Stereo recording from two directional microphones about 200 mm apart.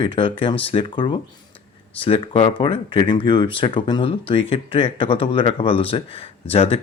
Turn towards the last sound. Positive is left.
turn(degrees=30)  # may be behind; listen again after turning